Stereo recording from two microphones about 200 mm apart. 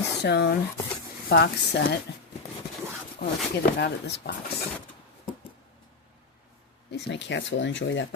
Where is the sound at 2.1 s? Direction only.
60° left (ahead or behind).